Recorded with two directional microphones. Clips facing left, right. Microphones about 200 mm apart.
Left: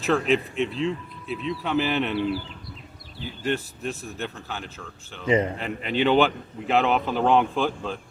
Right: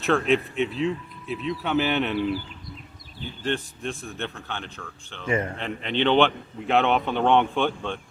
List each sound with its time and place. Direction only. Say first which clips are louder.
0.0 s a man's voice: even; centre (ahead or behind)
3.2 s a man's voice: left 1 dB; 5° left (ahead or behind)
5.2 s a man's voice: left 4 dB; 20° left (ahead or behind)
5.5 s a man's voice: left 1 dB; 5° left (ahead or behind)